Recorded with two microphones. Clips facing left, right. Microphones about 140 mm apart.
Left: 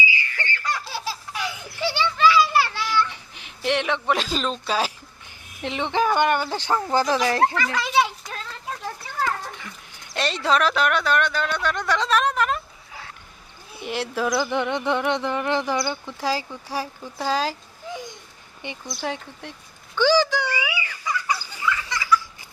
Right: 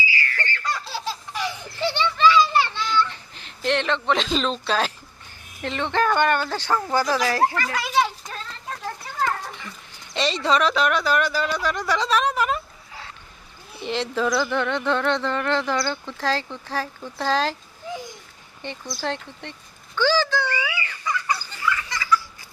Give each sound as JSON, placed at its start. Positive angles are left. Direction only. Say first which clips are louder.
{"t": 0.0, "sound": "baby laughter", "louder": "even", "side_deg": 20}
{"t": 5.6, "sound": "speech", "louder": "even", "side_deg": 15}
{"t": 7.5, "sound": "a child's voice", "louder": "left 1 dB", "side_deg": -5}
{"t": 9.4, "sound": "speech", "louder": "even", "side_deg": 5}
{"t": 13.8, "sound": "speech", "louder": "right 1 dB", "side_deg": 5}
{"t": 18.6, "sound": "speech", "louder": "right 1 dB", "side_deg": 15}
{"t": 20.0, "sound": "fowl", "louder": "left 2 dB", "side_deg": 15}